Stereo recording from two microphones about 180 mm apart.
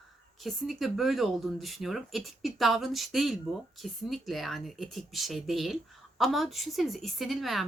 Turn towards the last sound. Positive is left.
turn(degrees=0)  # may be behind; listen again after turning